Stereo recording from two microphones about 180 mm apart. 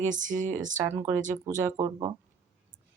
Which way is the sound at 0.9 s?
15° right (ahead or behind).